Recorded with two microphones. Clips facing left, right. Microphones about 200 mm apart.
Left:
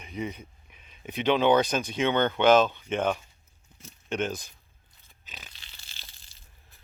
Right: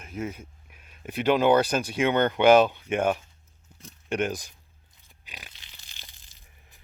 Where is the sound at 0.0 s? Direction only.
5° right (ahead or behind).